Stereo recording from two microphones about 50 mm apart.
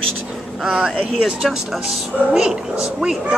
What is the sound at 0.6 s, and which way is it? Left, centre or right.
Speech, right.